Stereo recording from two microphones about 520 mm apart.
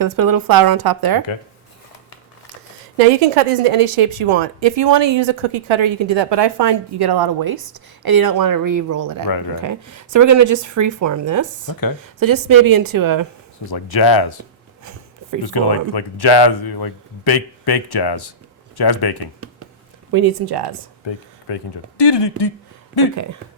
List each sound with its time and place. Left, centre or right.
0.0 s speech: right
3.3 s a woman's voice: right
13.7 s speech: left
15.4 s speech: left
20.1 s speech: right
21.1 s speech: left